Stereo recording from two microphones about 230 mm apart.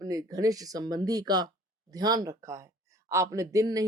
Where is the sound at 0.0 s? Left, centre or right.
Centre.